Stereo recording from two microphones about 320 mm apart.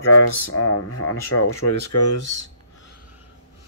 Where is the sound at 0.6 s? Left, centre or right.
Left.